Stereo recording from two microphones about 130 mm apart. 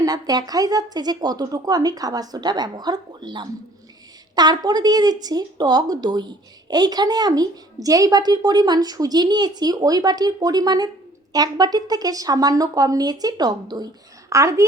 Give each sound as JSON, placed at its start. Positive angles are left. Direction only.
{"t": 0.0, "sound": "speech", "side_deg": -30}